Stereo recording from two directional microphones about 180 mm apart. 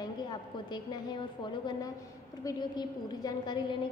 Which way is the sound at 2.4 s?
25° left (ahead or behind).